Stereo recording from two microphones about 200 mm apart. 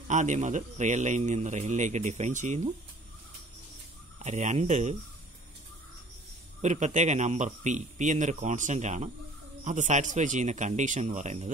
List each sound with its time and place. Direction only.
0.1 s a man's voice: 35° right (ahead or behind)
4.2 s a man's voice: 35° right (ahead or behind)
6.6 s a man's voice: 35° right (ahead or behind)